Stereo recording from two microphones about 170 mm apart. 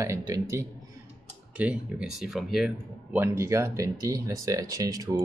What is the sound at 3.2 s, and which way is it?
A man's voice, 15° right (ahead or behind).